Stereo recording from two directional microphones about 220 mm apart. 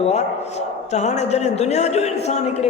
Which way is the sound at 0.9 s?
30° left (ahead or behind).